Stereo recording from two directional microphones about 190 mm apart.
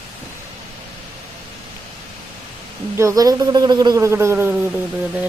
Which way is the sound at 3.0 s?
15° right (ahead or behind).